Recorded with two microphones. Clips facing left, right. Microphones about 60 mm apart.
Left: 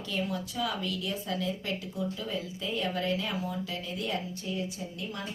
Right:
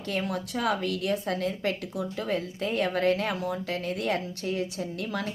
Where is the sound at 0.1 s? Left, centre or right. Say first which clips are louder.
Right 4 dB; right.